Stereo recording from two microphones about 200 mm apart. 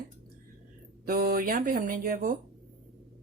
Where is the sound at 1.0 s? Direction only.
45° right (ahead or behind).